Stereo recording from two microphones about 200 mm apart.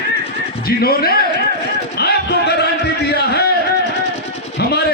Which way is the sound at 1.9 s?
55° left (ahead or behind).